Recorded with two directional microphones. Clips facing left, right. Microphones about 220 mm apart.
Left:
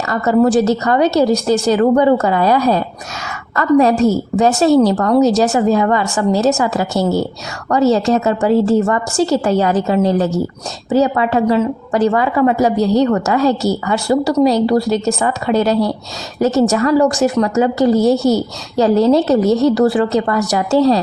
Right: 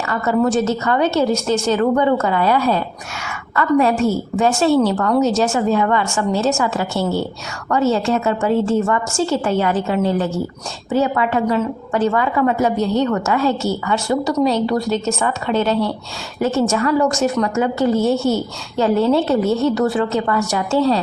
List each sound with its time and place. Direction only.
0.1 s a woman's voice: 35° left (ahead or behind)